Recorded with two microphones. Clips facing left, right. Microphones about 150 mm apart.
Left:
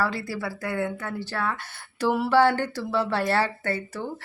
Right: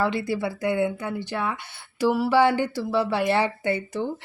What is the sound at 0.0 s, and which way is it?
Speech, 20° right (ahead or behind).